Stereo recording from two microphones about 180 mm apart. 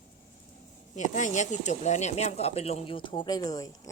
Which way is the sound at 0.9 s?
45° left (ahead or behind).